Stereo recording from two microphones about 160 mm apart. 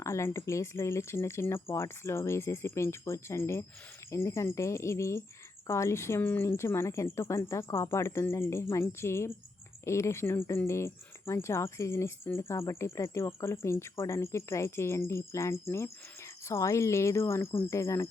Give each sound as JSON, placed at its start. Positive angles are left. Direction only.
{"t": 0.0, "sound": "speech", "side_deg": 20}